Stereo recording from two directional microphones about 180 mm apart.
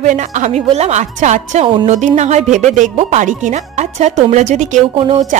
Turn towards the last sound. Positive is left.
turn(degrees=-30)  # may be behind; listen again after turning